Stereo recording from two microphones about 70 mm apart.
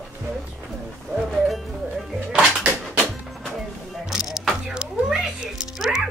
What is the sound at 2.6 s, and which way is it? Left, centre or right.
Music, centre.